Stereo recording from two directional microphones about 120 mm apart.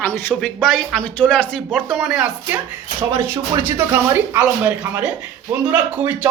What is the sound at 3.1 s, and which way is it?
Speech, 20° right (ahead or behind).